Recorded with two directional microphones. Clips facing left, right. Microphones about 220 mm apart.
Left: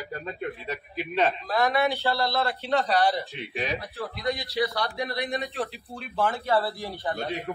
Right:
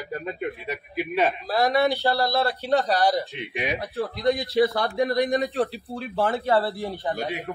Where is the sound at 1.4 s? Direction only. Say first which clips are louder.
Right 3 dB; 35° right (ahead or behind).